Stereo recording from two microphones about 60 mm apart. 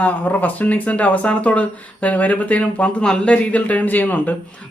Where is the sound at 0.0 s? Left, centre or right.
Left.